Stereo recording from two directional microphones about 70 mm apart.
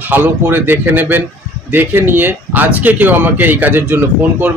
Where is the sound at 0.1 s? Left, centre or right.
Right.